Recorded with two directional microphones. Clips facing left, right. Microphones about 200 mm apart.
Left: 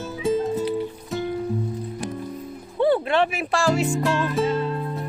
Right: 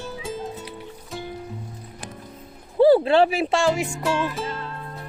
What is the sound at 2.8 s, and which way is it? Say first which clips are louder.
Music: right 5 dB; 35° right (ahead or behind).